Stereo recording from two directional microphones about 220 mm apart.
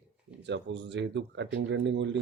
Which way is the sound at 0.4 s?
55° right (ahead or behind).